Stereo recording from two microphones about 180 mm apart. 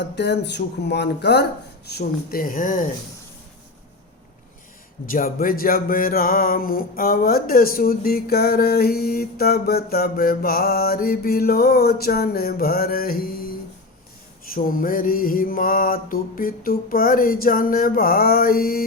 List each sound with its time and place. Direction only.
0.0 s speech: 70° left (ahead or behind)
1.9 s mantra: 60° left (ahead or behind)
5.0 s music: 50° left (ahead or behind)
14.5 s mantra: 50° left (ahead or behind)